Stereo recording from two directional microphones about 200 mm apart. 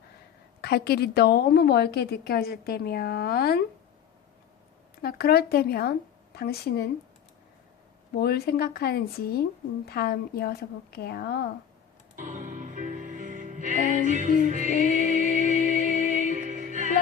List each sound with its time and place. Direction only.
0.6 s speech: 55° left (ahead or behind)
5.0 s speech: 50° left (ahead or behind)
8.1 s speech: 55° left (ahead or behind)
12.1 s music: 40° right (ahead or behind)